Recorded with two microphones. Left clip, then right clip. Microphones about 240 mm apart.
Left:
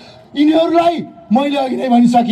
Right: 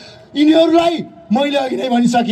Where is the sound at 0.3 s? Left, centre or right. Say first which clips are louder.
Right 1 dB; right.